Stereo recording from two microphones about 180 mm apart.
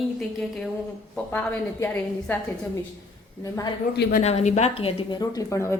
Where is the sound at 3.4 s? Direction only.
20° left (ahead or behind).